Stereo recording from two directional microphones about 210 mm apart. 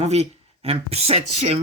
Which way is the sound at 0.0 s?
30° right (ahead or behind).